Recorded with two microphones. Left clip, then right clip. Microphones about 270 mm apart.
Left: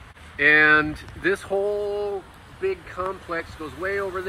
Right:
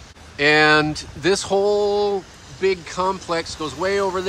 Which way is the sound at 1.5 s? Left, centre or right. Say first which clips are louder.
Right 6 dB; left.